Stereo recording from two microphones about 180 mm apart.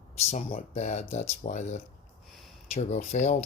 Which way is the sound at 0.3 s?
40° left (ahead or behind).